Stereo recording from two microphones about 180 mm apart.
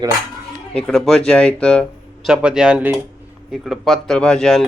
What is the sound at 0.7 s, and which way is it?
Speech, 5° left (ahead or behind).